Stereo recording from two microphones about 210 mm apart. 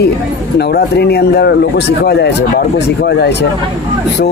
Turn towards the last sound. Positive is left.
turn(degrees=55)  # may be behind; listen again after turning